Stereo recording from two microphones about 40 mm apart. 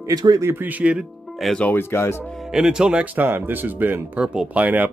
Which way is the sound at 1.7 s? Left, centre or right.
Left.